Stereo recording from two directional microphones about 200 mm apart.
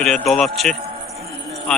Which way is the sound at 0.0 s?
Centre (ahead or behind).